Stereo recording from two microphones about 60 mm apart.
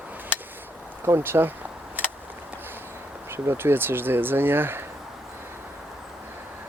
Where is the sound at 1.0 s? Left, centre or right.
Right.